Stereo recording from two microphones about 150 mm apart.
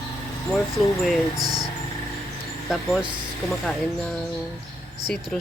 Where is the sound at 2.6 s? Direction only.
Centre (ahead or behind).